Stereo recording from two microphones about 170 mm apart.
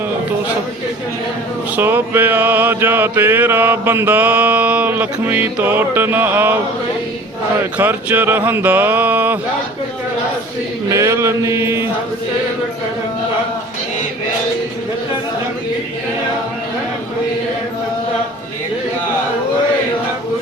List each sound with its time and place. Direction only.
1.7 s mantra: 10° right (ahead or behind)
7.6 s mantra: 10° right (ahead or behind)
10.8 s mantra: 15° right (ahead or behind)